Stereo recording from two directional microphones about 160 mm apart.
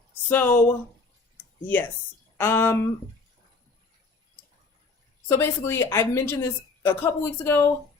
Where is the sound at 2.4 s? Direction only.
15° left (ahead or behind).